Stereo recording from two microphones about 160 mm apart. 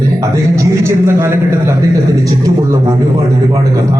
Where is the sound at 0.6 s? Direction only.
15° right (ahead or behind).